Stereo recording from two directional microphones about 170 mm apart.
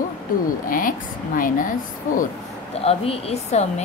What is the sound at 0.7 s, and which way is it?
A woman's voice, 55° left (ahead or behind).